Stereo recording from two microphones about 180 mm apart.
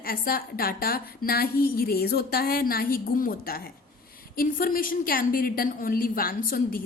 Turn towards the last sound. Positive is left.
turn(degrees=55)  # may be behind; listen again after turning